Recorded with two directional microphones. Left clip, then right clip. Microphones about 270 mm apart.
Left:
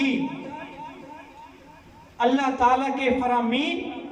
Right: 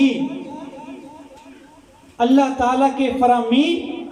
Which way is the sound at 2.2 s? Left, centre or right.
Right.